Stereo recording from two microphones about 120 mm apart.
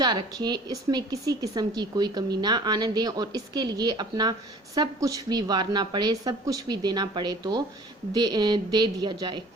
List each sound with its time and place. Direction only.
0.0 s a woman's voice: 35° right (ahead or behind)